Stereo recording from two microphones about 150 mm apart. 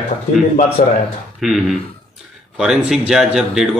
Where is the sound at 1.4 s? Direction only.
Centre (ahead or behind).